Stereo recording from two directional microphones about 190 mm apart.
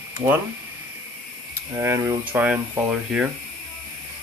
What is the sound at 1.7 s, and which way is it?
Speech, 15° right (ahead or behind).